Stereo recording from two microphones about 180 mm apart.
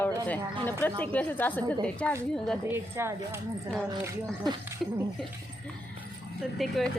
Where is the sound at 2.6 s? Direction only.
15° right (ahead or behind).